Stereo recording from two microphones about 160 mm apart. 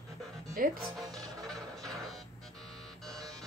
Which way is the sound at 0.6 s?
65° right (ahead or behind).